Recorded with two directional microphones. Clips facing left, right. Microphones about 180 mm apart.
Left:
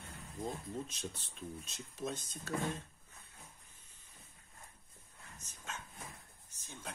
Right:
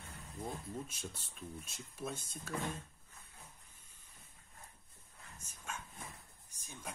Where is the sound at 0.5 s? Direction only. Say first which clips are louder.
Left 2 dB; 5° right (ahead or behind).